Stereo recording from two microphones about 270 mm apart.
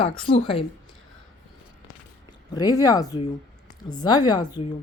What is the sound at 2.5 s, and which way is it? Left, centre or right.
Speech, centre.